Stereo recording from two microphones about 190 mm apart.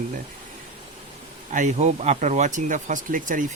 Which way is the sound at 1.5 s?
40° right (ahead or behind).